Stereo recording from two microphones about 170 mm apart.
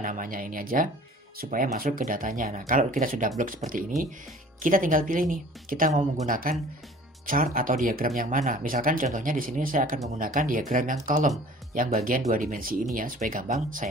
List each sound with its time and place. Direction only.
0.0 s speech: 50° right (ahead or behind)
12.4 s speech: 55° right (ahead or behind)